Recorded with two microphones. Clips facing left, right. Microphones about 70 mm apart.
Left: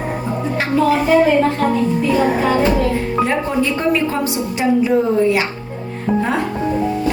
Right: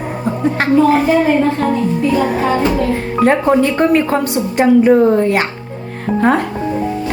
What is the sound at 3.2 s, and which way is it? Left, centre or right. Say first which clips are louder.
A woman's voice: right 6 dB; right.